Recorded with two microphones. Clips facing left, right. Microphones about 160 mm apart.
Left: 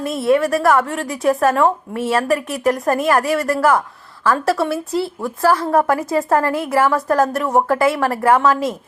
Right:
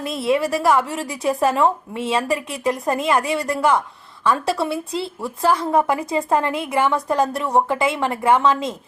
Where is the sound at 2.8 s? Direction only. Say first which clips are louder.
Left 2 dB; 25° right (ahead or behind).